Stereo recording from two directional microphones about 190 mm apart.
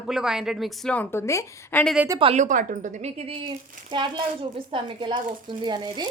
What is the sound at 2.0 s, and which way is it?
A woman's voice, 25° right (ahead or behind).